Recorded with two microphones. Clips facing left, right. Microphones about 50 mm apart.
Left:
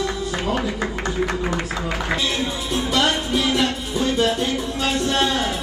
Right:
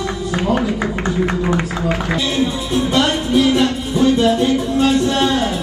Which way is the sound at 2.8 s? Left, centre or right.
Right.